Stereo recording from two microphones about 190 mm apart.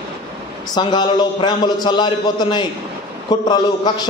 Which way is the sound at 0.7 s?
25° left (ahead or behind).